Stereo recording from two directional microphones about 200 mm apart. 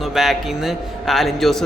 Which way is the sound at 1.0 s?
Centre (ahead or behind).